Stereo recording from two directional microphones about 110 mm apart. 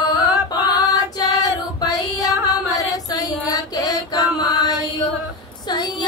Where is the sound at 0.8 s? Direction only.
35° left (ahead or behind).